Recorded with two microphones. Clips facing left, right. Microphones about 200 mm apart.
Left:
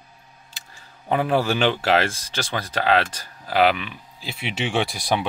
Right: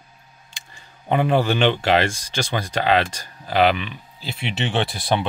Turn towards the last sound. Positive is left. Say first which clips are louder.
# right 1 dB
turn(degrees=10)  # may be behind; listen again after turning